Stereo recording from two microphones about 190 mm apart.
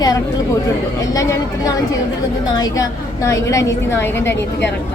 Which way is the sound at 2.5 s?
20° left (ahead or behind).